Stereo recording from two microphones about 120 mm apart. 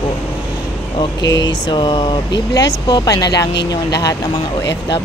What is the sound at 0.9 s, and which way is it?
Speech, 40° left (ahead or behind).